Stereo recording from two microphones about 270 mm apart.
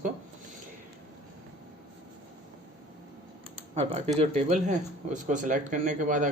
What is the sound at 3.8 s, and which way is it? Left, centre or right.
Speech, right.